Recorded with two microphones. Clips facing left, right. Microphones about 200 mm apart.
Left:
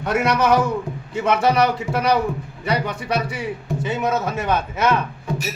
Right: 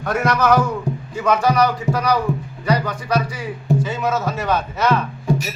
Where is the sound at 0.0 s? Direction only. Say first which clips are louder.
Even; 25° left (ahead or behind).